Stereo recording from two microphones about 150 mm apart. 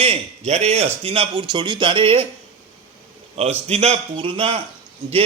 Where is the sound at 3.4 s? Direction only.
45° right (ahead or behind).